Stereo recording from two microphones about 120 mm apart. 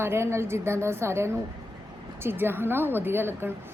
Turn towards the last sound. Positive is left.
turn(degrees=-20)  # may be behind; listen again after turning